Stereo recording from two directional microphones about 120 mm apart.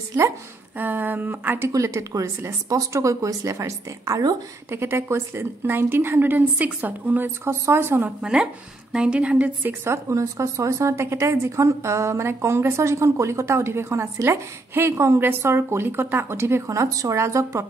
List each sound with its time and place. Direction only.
0.7 s speech: 15° right (ahead or behind)
1.7 s a woman's voice: 25° right (ahead or behind)
8.2 s a woman's voice: 5° right (ahead or behind); by 17.6 s 25° right (ahead or behind)